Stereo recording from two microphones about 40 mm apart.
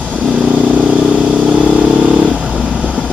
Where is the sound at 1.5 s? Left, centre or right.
Right.